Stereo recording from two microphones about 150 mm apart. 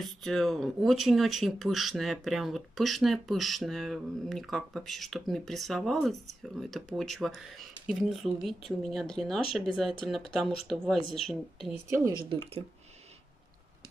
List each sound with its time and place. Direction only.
0.0 s speech: centre (ahead or behind)
12.3 s speech: 40° right (ahead or behind)